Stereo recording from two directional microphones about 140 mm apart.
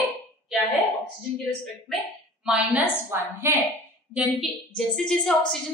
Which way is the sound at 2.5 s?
15° right (ahead or behind).